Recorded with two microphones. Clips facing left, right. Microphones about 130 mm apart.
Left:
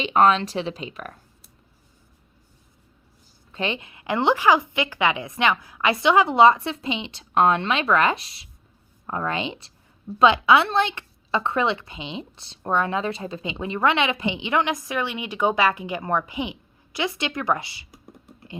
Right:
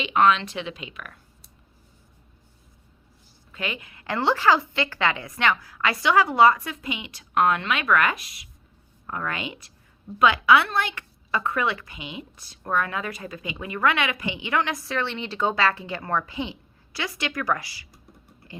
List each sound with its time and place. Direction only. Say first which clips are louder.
0.0 s speech: left 2 dB; 35° left (ahead or behind)
3.5 s a woman's voice: left 5 dB; 30° left (ahead or behind)